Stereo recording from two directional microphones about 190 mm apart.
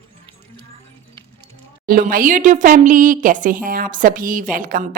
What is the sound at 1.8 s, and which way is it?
Speech, 50° right (ahead or behind).